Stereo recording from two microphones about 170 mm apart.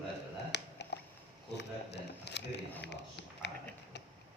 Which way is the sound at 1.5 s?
90° left.